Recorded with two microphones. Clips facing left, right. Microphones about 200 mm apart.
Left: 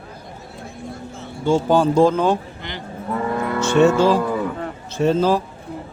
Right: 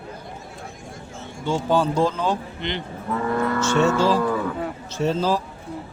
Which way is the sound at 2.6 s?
20° right (ahead or behind).